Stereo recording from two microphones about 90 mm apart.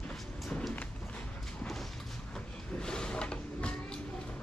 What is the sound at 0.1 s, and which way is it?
Vehicle, 10° left (ahead or behind).